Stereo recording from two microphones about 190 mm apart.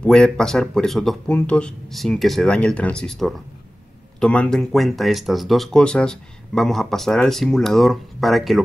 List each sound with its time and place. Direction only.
0.0 s speech: 5° left (ahead or behind)